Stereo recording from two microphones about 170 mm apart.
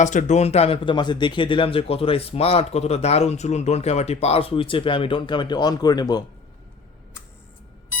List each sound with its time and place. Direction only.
0.0 s speech: 45° left (ahead or behind); by 6.2 s 25° left (ahead or behind)